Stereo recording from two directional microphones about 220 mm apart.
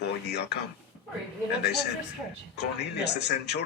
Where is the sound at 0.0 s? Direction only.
50° left (ahead or behind).